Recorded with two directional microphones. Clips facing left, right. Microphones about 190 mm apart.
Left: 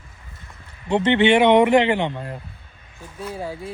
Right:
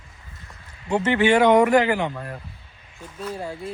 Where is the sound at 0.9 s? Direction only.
30° left (ahead or behind).